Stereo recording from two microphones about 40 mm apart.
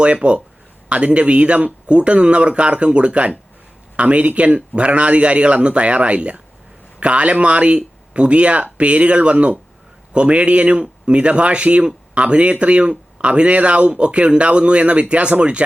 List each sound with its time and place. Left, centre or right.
0.0 s speech: right